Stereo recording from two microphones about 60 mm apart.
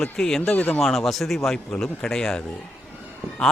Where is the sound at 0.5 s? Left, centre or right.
Left.